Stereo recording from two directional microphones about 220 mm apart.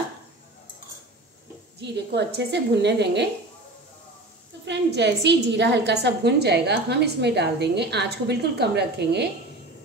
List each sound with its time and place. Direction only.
1.8 s a woman's voice: 50° right (ahead or behind)
4.6 s a woman's voice: 50° right (ahead or behind)